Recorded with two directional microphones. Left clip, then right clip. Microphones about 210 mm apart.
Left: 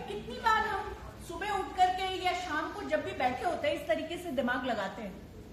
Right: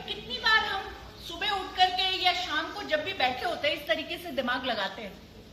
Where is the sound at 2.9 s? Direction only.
20° left (ahead or behind).